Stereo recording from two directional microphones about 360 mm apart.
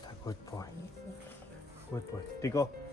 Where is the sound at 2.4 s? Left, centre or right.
Centre.